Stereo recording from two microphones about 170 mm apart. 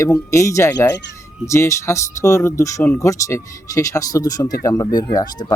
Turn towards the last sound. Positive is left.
turn(degrees=25)  # may be behind; listen again after turning